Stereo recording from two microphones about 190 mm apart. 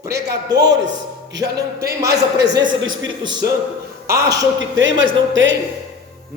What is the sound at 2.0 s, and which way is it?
Speech, 20° right (ahead or behind).